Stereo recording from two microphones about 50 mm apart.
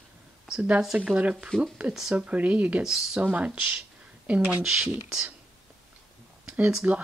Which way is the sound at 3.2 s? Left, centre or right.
Right.